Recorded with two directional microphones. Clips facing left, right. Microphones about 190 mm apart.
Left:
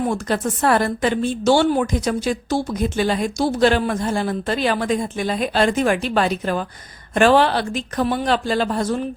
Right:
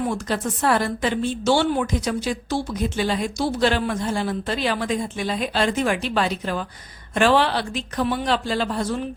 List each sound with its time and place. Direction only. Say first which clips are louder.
0.1 s a woman's voice: left 3 dB; 50° left (ahead or behind)